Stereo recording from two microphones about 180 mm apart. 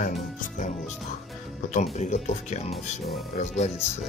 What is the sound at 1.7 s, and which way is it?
Speech, 40° left (ahead or behind).